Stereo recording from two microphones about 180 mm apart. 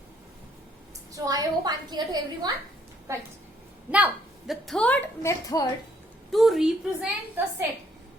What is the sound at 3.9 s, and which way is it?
A woman's voice, 5° right (ahead or behind).